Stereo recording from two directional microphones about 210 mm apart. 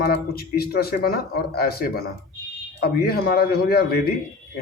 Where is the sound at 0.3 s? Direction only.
45° left (ahead or behind).